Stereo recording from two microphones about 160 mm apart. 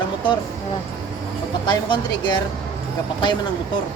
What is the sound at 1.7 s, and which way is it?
Speech, 30° left (ahead or behind).